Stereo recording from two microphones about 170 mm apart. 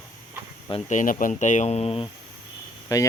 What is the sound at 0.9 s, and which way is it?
Speech, 50° left (ahead or behind).